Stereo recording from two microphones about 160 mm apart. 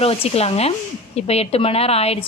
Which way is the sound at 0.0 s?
40° left (ahead or behind).